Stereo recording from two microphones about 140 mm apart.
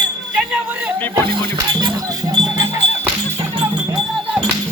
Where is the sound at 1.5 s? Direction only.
25° right (ahead or behind).